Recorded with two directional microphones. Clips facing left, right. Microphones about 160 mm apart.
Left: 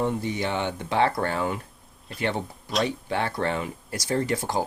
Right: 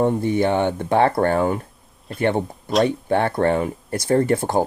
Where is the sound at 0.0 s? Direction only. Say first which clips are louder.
Right 8 dB; 50° right (ahead or behind).